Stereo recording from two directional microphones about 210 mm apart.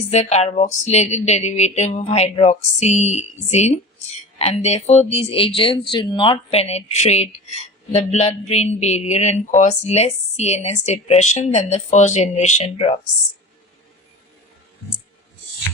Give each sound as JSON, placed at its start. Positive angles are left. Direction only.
{"t": 0.1, "sound": "speech", "side_deg": 30}